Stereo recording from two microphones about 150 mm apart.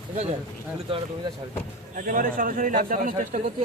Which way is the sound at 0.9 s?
35° right (ahead or behind).